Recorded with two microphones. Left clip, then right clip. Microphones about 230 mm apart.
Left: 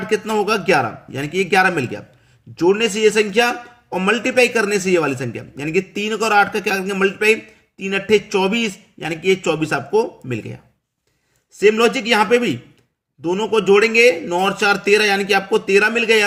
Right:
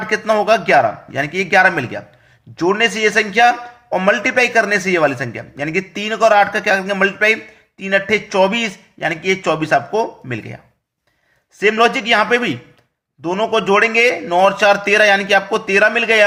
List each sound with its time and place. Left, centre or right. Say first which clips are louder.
0.0 s a man's voice: right 3 dB; centre
11.6 s a man's voice: right 1 dB; centre